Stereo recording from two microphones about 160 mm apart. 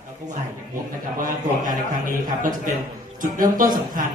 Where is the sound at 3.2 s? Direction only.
60° right (ahead or behind).